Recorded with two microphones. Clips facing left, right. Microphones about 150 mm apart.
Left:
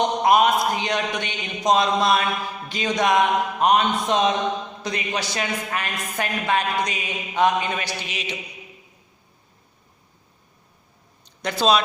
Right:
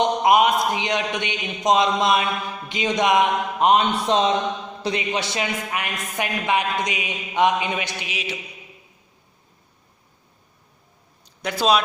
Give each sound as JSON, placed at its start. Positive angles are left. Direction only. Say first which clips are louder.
{"t": 0.2, "sound": "a man's voice", "louder": "left 2 dB", "side_deg": -15}
{"t": 8.0, "sound": "speech", "louder": "right 1 dB", "side_deg": -10}
{"t": 11.3, "sound": "speech", "louder": "even", "side_deg": -10}